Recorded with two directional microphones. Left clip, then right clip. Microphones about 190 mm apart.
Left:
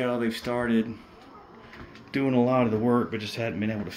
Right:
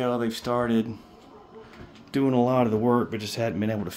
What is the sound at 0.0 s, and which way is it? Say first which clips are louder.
Speech: right 1 dB; 15° right (ahead or behind).